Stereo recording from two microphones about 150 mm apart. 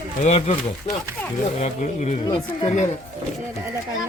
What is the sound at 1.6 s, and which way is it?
Speech, 50° left (ahead or behind).